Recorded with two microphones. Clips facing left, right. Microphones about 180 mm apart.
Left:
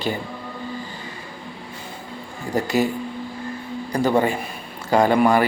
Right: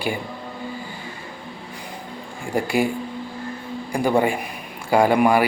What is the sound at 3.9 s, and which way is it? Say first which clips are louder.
Speech: even; 10° right (ahead or behind).